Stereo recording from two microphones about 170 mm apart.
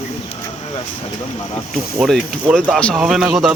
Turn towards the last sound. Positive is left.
turn(degrees=0)  # may be behind; listen again after turning